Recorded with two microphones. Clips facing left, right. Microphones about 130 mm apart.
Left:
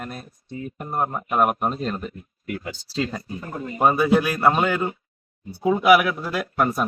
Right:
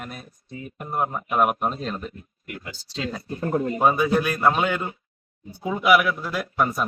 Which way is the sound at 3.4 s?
55° right (ahead or behind).